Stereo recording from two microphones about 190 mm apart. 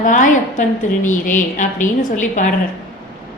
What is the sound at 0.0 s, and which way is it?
A woman's voice, 45° left (ahead or behind).